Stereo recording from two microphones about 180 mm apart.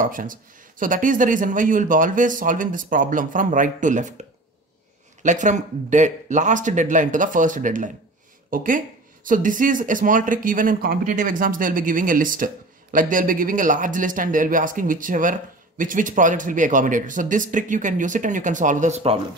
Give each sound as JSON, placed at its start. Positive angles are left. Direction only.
{"t": 0.0, "sound": "speech", "side_deg": -50}